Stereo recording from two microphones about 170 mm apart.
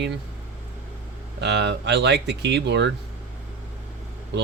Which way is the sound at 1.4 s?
90° right.